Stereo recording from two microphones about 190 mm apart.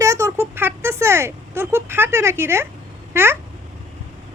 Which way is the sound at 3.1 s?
10° right (ahead or behind).